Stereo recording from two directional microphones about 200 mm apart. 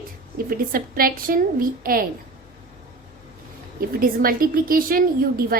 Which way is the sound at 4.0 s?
45° right (ahead or behind).